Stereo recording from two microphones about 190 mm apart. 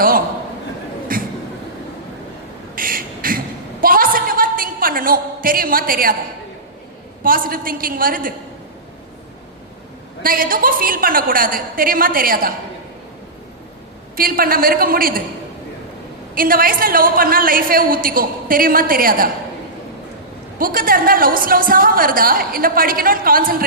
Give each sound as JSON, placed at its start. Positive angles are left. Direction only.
{"t": 1.1, "sound": "a sound", "side_deg": -50}
{"t": 2.7, "sound": "a sound", "side_deg": -50}
{"t": 7.2, "sound": "a woman's voice", "side_deg": -50}
{"t": 10.2, "sound": "a woman's voice", "side_deg": -50}
{"t": 14.2, "sound": "a woman's voice", "side_deg": -50}
{"t": 16.3, "sound": "a woman's voice", "side_deg": -50}
{"t": 20.6, "sound": "a woman's voice", "side_deg": -50}